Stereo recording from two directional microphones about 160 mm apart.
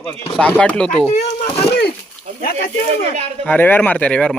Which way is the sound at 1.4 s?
40° left (ahead or behind).